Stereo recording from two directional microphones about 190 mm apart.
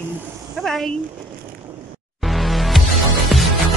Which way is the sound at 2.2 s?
Centre (ahead or behind).